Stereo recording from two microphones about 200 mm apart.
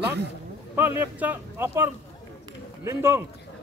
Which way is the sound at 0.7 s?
10° right (ahead or behind).